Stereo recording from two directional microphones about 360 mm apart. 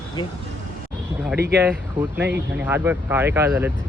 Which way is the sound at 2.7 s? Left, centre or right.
Centre.